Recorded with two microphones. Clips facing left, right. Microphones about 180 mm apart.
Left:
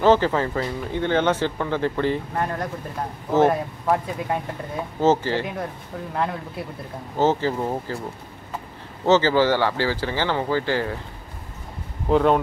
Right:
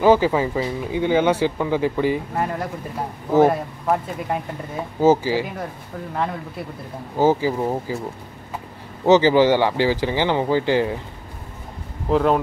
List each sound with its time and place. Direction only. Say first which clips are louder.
0.0 s speech: right 2 dB; 10° right (ahead or behind)
7.2 s speech: right 3 dB; 10° right (ahead or behind)
9.0 s speech: right 4 dB; 15° right (ahead or behind)
12.1 s speech: even; centre (ahead or behind)